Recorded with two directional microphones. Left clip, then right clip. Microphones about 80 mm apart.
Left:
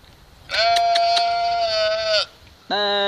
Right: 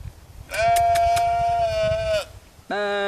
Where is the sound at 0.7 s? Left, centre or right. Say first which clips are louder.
Even; centre.